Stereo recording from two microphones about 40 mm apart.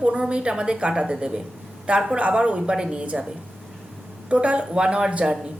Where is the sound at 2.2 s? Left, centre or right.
Right.